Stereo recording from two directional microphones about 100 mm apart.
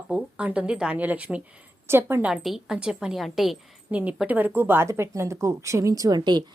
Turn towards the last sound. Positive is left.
turn(degrees=-50)  # may be behind; listen again after turning